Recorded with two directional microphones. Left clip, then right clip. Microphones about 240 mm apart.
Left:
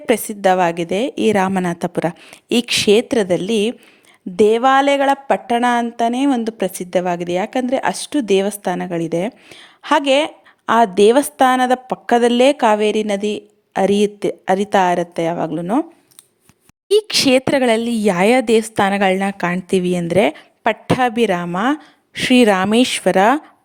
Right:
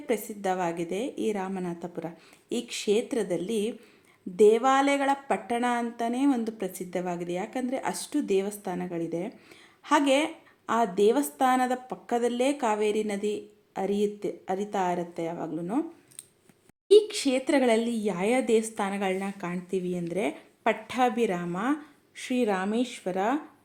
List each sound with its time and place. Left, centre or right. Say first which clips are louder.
0.0 s a woman's voice: left 14 dB; left
16.9 s a woman's voice: left 7 dB; left